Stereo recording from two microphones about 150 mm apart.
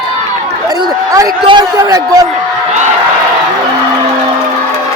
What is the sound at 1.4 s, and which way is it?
Speech, 30° right (ahead or behind).